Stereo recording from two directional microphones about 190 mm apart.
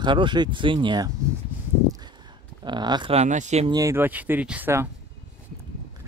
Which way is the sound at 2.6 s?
25° right (ahead or behind).